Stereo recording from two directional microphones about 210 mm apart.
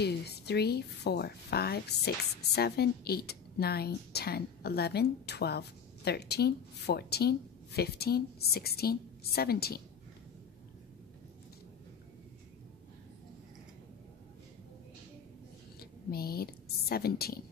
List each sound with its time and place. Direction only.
0.0 s speech: 50° left (ahead or behind)
15.8 s a woman's voice: 45° left (ahead or behind)